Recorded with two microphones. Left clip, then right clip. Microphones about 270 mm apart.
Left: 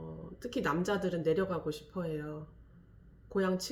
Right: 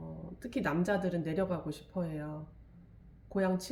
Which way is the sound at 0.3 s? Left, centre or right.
Centre.